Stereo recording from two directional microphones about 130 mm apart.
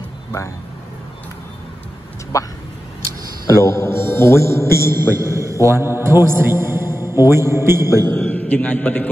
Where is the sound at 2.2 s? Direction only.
25° left (ahead or behind).